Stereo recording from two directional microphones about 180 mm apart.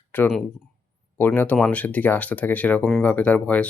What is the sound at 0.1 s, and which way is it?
Speech, 5° left (ahead or behind).